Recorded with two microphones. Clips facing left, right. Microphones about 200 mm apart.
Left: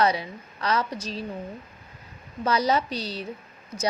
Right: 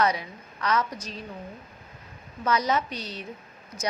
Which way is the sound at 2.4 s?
30° left (ahead or behind).